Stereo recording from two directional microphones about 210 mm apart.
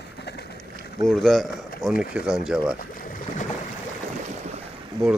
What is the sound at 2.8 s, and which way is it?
Boat, 40° left (ahead or behind).